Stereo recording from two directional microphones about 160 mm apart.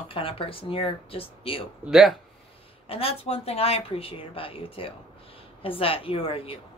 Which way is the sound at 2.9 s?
35° left (ahead or behind).